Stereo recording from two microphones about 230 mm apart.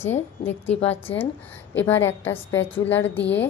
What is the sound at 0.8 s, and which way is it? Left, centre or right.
Speech, left.